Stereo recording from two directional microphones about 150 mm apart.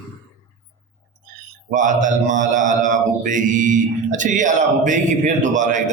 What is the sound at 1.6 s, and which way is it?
Mantra, 60° right (ahead or behind).